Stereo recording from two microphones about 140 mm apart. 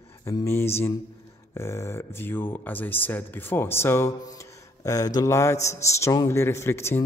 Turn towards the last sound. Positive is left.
turn(degrees=20)  # may be behind; listen again after turning